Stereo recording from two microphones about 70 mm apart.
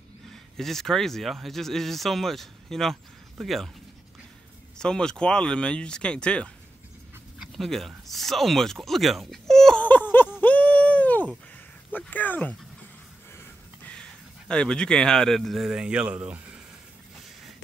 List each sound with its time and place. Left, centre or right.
0.3 s speech: centre
4.7 s speech: centre
7.3 s speech: centre
9.8 s a sound: left
11.9 s speech: left
14.5 s speech: centre
15.6 s speech: centre